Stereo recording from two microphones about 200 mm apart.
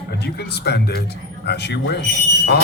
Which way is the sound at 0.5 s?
55° left (ahead or behind).